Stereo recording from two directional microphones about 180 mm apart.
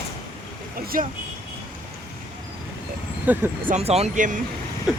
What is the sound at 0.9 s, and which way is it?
Speech, 50° right (ahead or behind).